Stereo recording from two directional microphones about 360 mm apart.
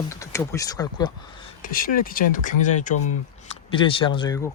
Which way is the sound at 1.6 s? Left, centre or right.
Left.